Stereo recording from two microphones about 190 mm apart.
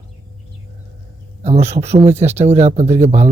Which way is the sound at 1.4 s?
35° right (ahead or behind).